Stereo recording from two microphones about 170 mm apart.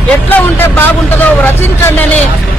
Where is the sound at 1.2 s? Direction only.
10° left (ahead or behind).